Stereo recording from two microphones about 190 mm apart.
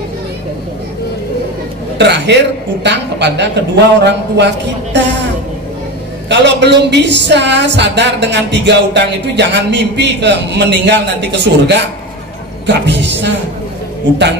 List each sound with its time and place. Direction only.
2.0 s a man's voice: 65° right (ahead or behind)
6.2 s a woman's voice: 65° right (ahead or behind)